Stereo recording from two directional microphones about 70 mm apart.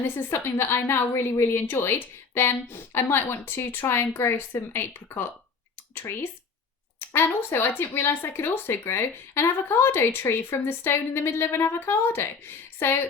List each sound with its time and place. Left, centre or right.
0.3 s speech: left